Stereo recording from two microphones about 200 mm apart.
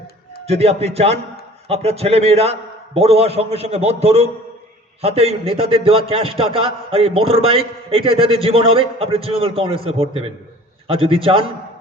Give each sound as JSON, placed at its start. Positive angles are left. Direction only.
{"t": 0.4, "sound": "a man's voice", "side_deg": -30}